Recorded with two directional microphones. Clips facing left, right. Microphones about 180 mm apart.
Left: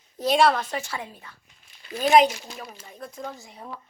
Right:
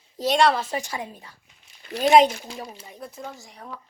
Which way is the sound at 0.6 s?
15° right (ahead or behind).